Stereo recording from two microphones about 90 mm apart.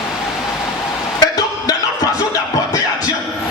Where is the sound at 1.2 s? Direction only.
45° left (ahead or behind).